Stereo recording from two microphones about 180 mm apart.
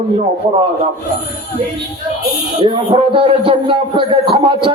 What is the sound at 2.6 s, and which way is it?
A man's voice, 30° right (ahead or behind).